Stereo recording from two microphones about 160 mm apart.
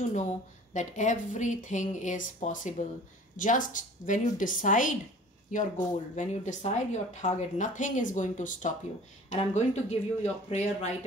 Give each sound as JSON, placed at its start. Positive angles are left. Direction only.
{"t": 0.7, "sound": "a woman's voice", "side_deg": 50}